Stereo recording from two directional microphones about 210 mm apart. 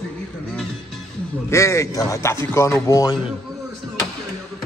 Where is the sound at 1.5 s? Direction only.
15° left (ahead or behind).